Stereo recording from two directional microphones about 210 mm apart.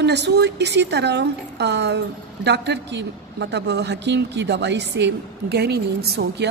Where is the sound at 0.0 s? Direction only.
55° right (ahead or behind).